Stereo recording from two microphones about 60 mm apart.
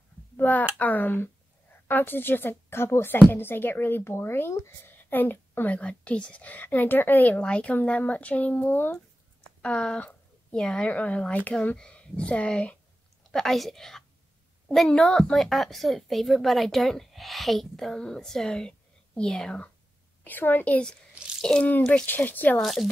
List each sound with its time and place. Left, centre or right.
0.4 s a woman's voice: left
5.7 s a woman's voice: left
9.6 s a woman's voice: centre
10.9 s a woman's voice: left
13.3 s a woman's voice: centre
20.2 s speech: left
21.4 s speech: centre
22.0 s a woman's voice: left
22.6 s a woman's voice: centre